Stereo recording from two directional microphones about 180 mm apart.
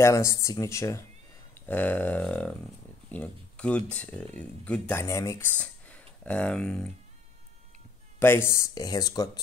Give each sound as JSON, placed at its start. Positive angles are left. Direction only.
{"t": 0.0, "sound": "speech", "side_deg": 15}
{"t": 1.5, "sound": "a sound", "side_deg": 10}
{"t": 3.1, "sound": "speech", "side_deg": 5}
{"t": 8.2, "sound": "speech", "side_deg": 15}